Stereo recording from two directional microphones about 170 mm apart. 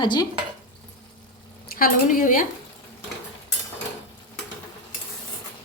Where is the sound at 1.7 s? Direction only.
55° left (ahead or behind).